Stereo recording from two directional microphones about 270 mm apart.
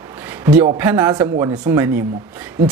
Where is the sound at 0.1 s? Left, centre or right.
Centre.